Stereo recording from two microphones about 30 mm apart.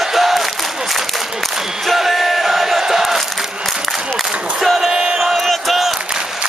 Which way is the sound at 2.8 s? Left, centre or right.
Centre.